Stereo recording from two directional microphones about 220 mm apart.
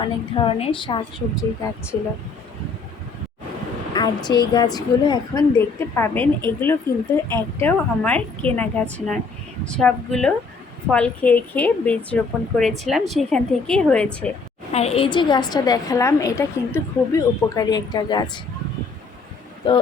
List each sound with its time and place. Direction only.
0.0 s a woman's voice: 25° left (ahead or behind)
3.9 s a woman's voice: 20° left (ahead or behind)
14.7 s a woman's voice: 30° left (ahead or behind)
19.6 s a woman's voice: 20° left (ahead or behind)